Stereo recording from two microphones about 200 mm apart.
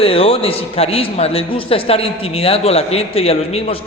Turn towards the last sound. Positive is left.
turn(degrees=30)  # may be behind; listen again after turning